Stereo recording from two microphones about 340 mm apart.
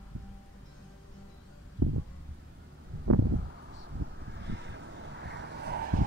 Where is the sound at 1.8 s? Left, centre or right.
Right.